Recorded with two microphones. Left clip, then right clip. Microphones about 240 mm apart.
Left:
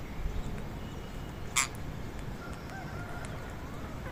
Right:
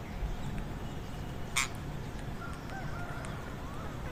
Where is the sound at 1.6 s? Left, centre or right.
Centre.